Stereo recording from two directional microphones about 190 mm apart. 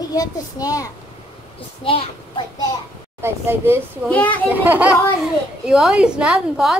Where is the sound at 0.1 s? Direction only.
20° left (ahead or behind).